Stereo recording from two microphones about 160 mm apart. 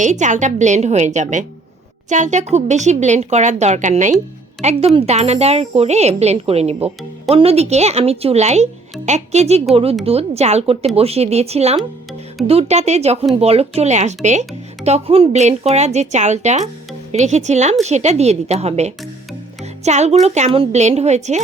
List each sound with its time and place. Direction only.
0.0 s speech: 50° right (ahead or behind)